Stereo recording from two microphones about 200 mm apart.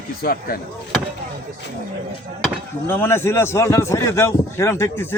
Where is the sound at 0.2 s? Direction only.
50° left (ahead or behind).